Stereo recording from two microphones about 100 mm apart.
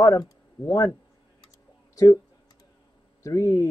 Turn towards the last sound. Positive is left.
turn(degrees=30)  # may be behind; listen again after turning